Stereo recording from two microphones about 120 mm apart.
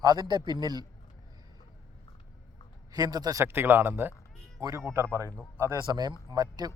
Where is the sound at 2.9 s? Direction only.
30° right (ahead or behind).